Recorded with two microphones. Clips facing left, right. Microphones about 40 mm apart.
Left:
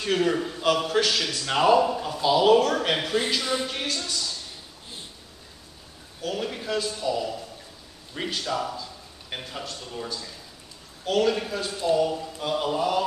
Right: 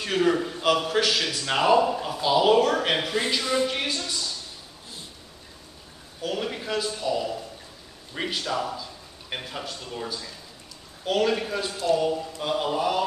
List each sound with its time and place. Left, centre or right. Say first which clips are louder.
0.0 s speech: right 1 dB; centre
2.4 s speech: left 1 dB; right
6.2 s speech: even; centre